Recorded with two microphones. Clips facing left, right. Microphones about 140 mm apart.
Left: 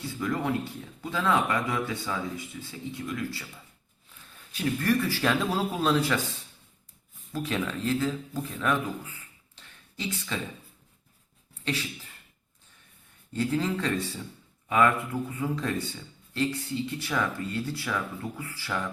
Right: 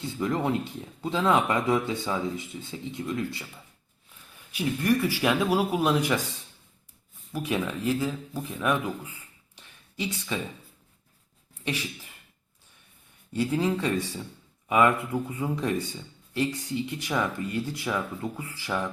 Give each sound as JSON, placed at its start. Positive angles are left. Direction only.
{"t": 0.0, "sound": "speech", "side_deg": -25}
{"t": 4.5, "sound": "speech", "side_deg": -15}
{"t": 7.3, "sound": "speech", "side_deg": -15}
{"t": 9.6, "sound": "a sound", "side_deg": -15}
{"t": 11.6, "sound": "beatboxing", "side_deg": -15}
{"t": 13.3, "sound": "speech", "side_deg": -15}